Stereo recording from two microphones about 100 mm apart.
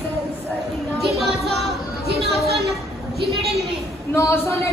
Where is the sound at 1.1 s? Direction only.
Centre (ahead or behind).